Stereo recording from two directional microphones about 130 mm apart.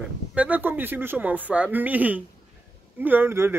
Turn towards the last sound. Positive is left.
turn(degrees=-20)  # may be behind; listen again after turning